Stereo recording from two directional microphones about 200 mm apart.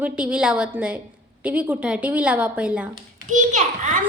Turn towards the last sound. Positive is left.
turn(degrees=-35)  # may be behind; listen again after turning